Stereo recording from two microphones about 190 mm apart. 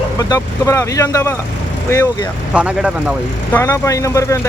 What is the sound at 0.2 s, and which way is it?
Speech, 15° left (ahead or behind).